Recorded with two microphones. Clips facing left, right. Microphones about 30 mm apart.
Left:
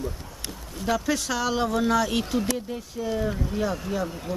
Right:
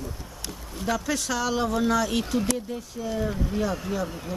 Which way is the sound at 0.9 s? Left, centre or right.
Centre.